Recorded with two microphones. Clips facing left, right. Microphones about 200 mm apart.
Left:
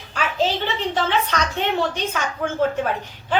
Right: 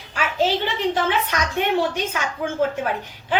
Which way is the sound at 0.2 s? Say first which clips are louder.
Right 1 dB; 10° right (ahead or behind).